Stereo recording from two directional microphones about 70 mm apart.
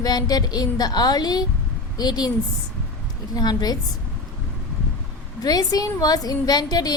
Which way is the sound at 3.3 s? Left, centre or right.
Left.